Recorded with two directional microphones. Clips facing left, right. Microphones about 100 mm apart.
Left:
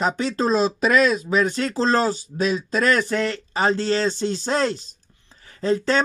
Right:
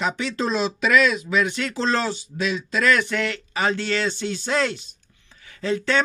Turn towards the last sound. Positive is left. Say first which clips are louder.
# left 2 dB
turn(degrees=35)  # may be behind; listen again after turning